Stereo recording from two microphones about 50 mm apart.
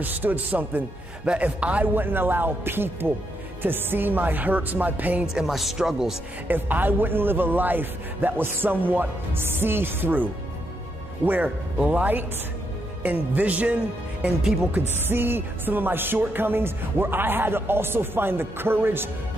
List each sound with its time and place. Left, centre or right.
0.0 s music: right
1.2 s a man's voice: right
2.0 s speech: right
3.6 s music: right
5.2 s speech: centre
6.4 s speech: right
11.2 s music: right
15.0 s speech: right